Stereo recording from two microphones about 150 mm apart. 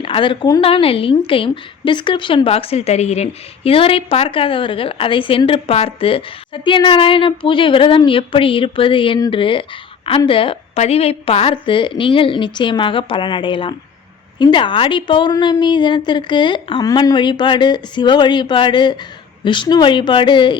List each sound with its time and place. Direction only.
0.0 s a woman's voice: 35° left (ahead or behind)